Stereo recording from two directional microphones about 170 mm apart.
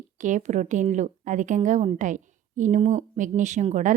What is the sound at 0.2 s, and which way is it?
Speech, 45° right (ahead or behind).